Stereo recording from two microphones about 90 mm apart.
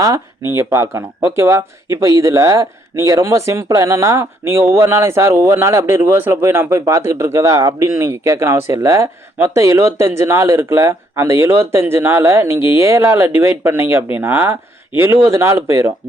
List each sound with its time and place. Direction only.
0.5 s speech: 30° right (ahead or behind)